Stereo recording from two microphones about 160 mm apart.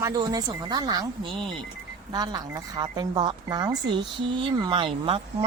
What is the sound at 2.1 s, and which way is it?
Speech, 25° right (ahead or behind).